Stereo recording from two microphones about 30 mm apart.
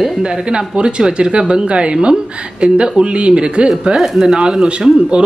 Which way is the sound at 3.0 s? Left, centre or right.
Right.